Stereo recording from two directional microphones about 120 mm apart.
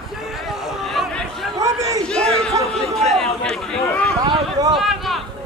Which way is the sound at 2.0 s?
5° left (ahead or behind).